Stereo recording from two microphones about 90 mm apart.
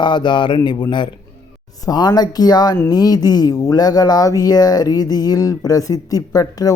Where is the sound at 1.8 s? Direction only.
50° left (ahead or behind).